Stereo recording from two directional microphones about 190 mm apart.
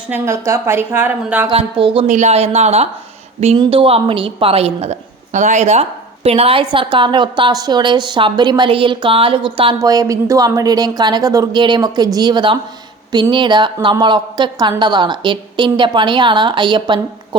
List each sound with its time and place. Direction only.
0.1 s a woman's voice: 15° right (ahead or behind)
1.5 s a woman's voice: 30° right (ahead or behind)